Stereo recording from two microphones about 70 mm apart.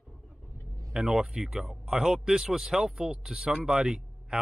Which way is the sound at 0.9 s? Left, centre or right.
Centre.